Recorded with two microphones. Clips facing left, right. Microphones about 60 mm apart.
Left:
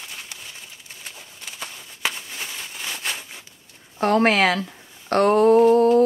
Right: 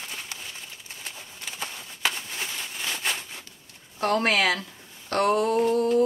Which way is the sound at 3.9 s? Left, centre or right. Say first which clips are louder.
Left 5 dB; left.